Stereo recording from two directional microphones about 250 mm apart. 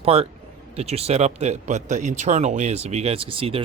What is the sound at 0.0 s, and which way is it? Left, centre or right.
Speech, right.